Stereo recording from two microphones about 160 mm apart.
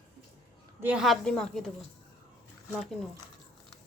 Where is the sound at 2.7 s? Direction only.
Centre (ahead or behind).